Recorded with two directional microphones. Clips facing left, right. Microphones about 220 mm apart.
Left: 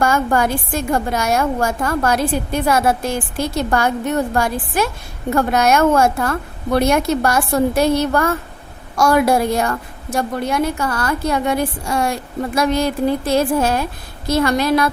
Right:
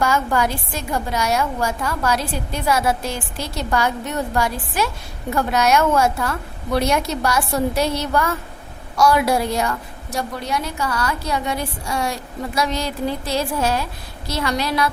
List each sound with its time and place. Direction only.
0.0 s a woman's voice: 50° left (ahead or behind)